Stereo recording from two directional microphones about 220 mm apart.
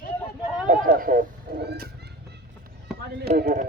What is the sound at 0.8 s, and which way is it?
Speech, 40° right (ahead or behind).